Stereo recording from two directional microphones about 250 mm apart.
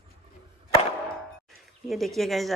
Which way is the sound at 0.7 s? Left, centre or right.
Left.